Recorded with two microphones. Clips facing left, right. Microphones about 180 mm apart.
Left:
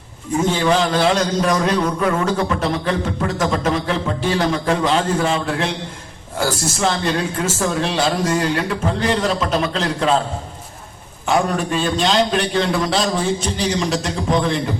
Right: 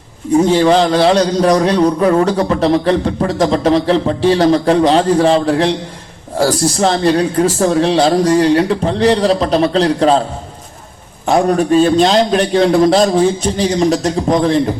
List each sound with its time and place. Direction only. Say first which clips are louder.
0.3 s a man's voice: right 7 dB; 35° right (ahead or behind)
11.3 s a man's voice: right 7 dB; 40° right (ahead or behind)